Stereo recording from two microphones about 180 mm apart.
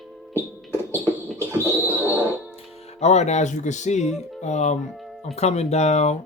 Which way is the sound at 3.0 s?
40° left (ahead or behind).